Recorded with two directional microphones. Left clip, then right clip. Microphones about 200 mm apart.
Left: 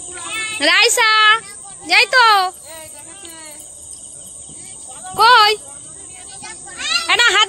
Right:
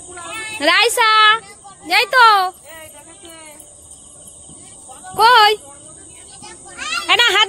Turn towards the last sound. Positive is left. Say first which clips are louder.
# even
turn(degrees=-10)  # may be behind; listen again after turning